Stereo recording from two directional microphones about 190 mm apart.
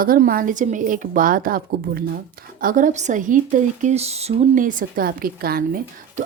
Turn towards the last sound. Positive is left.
turn(degrees=-50)  # may be behind; listen again after turning